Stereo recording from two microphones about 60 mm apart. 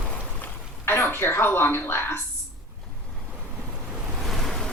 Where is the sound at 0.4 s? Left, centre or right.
Left.